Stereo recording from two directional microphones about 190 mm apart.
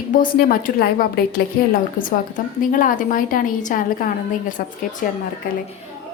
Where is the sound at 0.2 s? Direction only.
50° left (ahead or behind).